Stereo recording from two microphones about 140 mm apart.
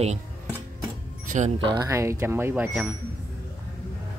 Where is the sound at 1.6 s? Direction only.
35° right (ahead or behind).